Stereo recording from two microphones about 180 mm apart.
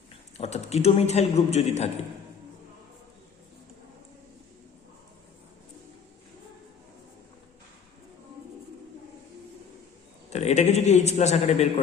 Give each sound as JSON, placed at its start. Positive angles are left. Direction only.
{"t": 0.3, "sound": "a man's voice", "side_deg": 35}
{"t": 10.2, "sound": "a man's voice", "side_deg": 40}